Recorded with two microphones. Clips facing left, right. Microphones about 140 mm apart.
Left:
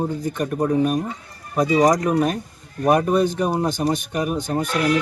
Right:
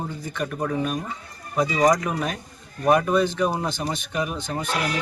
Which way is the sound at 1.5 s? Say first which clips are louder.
Left 4 dB; 45° left (ahead or behind).